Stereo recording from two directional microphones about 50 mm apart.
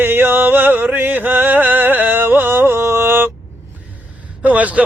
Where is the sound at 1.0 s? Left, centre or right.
Right.